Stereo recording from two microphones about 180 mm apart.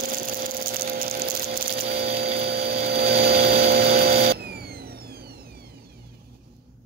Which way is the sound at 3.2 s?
60° right (ahead or behind).